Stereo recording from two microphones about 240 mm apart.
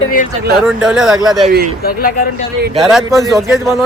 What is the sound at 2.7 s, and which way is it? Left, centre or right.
Speech, centre.